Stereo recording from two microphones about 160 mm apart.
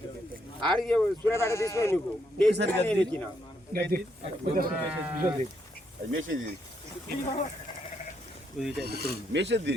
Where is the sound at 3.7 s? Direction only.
70° right (ahead or behind).